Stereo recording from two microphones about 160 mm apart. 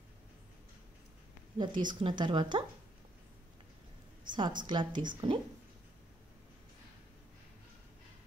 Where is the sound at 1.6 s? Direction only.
30° right (ahead or behind).